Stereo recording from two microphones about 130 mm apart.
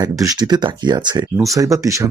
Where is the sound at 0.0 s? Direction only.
30° right (ahead or behind).